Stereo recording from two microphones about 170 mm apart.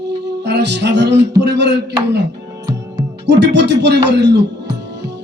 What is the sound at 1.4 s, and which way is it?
Speech, 90° right.